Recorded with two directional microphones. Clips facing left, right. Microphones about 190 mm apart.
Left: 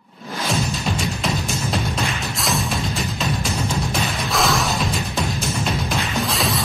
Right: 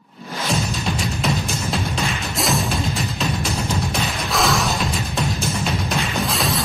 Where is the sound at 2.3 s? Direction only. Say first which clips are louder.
Right 4 dB; centre (ahead or behind).